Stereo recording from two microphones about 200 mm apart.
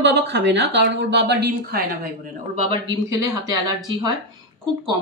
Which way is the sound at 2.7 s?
20° right (ahead or behind).